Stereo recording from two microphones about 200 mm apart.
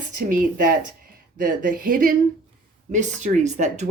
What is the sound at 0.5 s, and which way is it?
Speech, 40° right (ahead or behind).